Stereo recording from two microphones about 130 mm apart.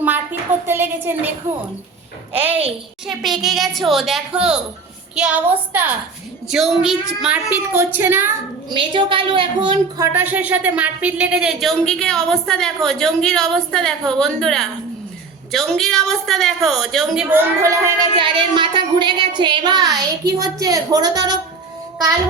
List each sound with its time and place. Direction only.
0.0 s a woman's voice: 15° right (ahead or behind)
2.3 s a woman's voice: 15° right (ahead or behind)
3.1 s a woman's voice: 5° right (ahead or behind)
7.5 s a woman's voice: 15° right (ahead or behind)
8.7 s a woman's voice: 40° right (ahead or behind)
10.0 s speech: 15° right (ahead or behind); by 17.2 s centre (ahead or behind)
17.2 s a woman's voice: 20° right (ahead or behind)
18.2 s a woman's voice: 40° right (ahead or behind)